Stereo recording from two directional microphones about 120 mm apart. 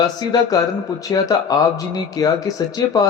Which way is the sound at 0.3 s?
35° left (ahead or behind).